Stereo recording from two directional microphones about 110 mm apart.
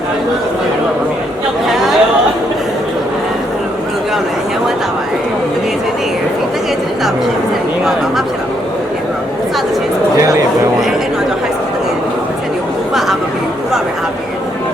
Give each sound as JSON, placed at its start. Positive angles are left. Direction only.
{"t": 1.6, "sound": "chatter", "side_deg": -5}
{"t": 10.2, "sound": "a sound", "side_deg": -30}
{"t": 12.9, "sound": "chatter", "side_deg": 0}